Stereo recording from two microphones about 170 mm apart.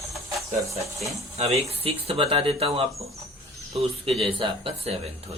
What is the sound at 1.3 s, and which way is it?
Speech, 35° right (ahead or behind).